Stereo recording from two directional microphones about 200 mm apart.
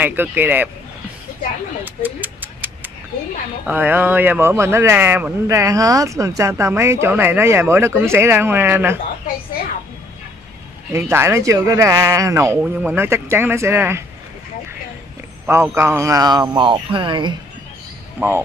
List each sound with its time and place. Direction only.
0.0 s speech: 10° right (ahead or behind)
2.0 s a sound: 10° right (ahead or behind)
3.6 s speech: 10° right (ahead or behind)
10.9 s speech: 10° right (ahead or behind)
15.4 s a man's voice: 10° right (ahead or behind)